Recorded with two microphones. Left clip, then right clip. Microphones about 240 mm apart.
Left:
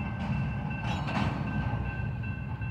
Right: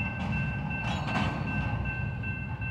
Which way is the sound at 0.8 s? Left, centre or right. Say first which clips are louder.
Right 1 dB; right.